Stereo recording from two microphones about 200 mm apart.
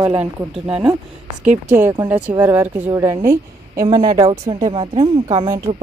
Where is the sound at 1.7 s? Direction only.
10° right (ahead or behind); by 5.5 s 25° right (ahead or behind).